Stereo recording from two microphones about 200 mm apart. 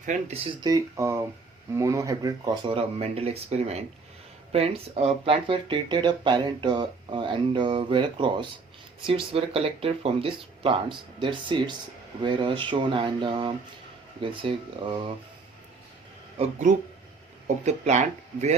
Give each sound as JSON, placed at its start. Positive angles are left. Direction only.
{"t": 0.0, "sound": "speech", "side_deg": -40}
{"t": 0.6, "sound": "speech", "side_deg": -15}
{"t": 16.4, "sound": "speech", "side_deg": -35}